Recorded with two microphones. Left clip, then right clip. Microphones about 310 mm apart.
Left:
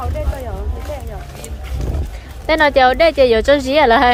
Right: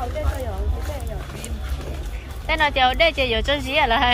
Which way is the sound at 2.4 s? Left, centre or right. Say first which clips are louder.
Left 7 dB; centre.